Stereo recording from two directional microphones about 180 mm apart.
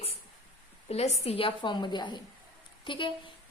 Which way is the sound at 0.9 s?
35° left (ahead or behind).